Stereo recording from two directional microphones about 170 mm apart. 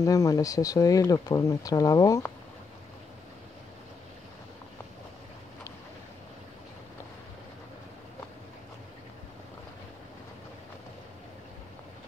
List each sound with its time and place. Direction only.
0.0 s speech: 20° left (ahead or behind)